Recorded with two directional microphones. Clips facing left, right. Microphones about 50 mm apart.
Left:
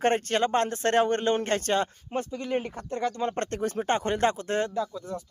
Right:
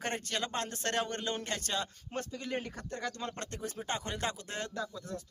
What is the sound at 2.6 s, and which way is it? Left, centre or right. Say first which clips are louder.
Speech: left 9 dB; left.